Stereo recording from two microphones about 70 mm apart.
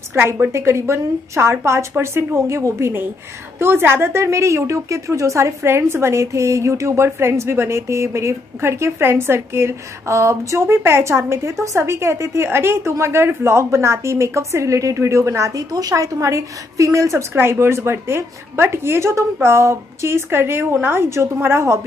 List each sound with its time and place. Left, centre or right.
0.3 s a woman's voice: right
17.3 s a woman's voice: right